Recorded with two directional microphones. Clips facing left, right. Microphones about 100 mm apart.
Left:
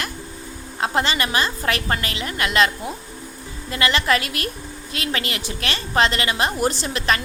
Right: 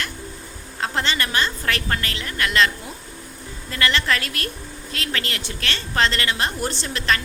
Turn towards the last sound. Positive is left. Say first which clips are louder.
# left 1 dB
turn(degrees=20)  # may be behind; listen again after turning